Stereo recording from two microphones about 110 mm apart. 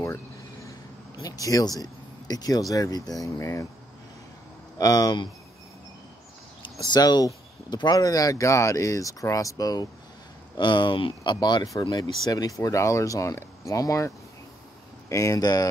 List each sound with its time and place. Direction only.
1.2 s speech: 30° left (ahead or behind)
4.7 s speech: 35° left (ahead or behind)
6.9 s speech: 40° left (ahead or behind)
10.6 s speech: 45° left (ahead or behind)
11.3 s speech: 40° left (ahead or behind)